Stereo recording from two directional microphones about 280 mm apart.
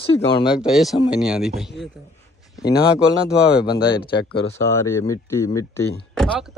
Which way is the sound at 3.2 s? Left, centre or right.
Centre.